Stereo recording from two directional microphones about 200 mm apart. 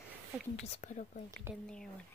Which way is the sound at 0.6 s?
35° left (ahead or behind).